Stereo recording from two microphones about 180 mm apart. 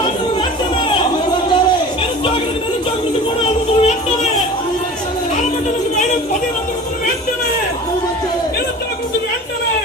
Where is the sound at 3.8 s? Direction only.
35° left (ahead or behind).